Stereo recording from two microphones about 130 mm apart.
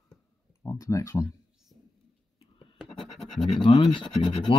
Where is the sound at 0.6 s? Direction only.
25° left (ahead or behind).